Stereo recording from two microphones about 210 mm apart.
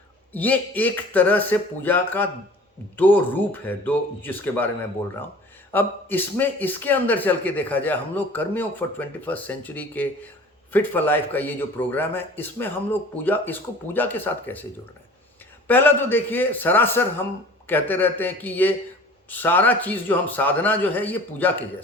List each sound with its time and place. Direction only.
0.3 s a man's voice: 10° left (ahead or behind)
5.7 s a man's voice: 10° left (ahead or behind)